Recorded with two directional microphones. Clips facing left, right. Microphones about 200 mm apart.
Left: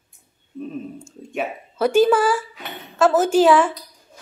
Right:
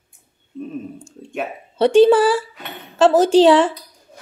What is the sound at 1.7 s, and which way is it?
A woman's voice, 30° right (ahead or behind).